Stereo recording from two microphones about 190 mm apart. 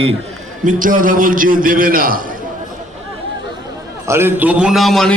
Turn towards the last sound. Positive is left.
turn(degrees=0)  # may be behind; listen again after turning